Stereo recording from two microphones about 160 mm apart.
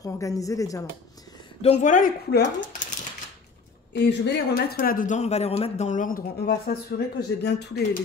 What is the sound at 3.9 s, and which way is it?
Speech, 90° left.